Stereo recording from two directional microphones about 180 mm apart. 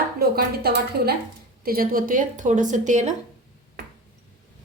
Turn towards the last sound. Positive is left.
turn(degrees=-40)  # may be behind; listen again after turning